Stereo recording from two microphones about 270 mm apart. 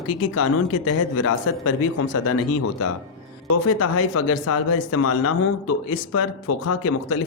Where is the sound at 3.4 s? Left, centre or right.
Left.